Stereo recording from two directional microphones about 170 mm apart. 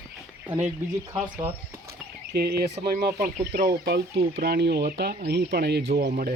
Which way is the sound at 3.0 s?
55° right (ahead or behind).